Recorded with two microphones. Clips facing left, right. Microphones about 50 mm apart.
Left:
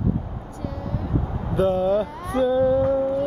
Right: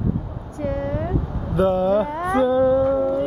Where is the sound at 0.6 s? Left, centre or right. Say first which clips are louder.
Right 7 dB; right.